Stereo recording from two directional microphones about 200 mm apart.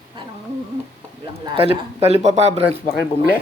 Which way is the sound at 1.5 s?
30° right (ahead or behind).